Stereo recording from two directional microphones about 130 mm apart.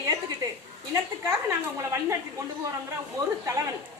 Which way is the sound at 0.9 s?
20° right (ahead or behind).